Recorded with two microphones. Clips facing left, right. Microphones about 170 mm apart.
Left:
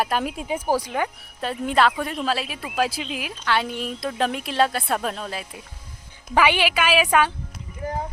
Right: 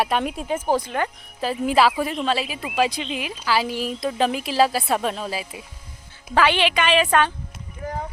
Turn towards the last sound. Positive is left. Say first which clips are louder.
# left 1 dB
turn(degrees=30)  # may be behind; listen again after turning